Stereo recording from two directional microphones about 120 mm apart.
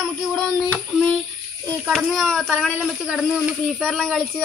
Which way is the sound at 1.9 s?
5° left (ahead or behind).